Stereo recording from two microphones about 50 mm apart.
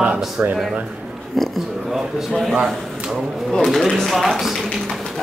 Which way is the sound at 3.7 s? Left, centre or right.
Centre.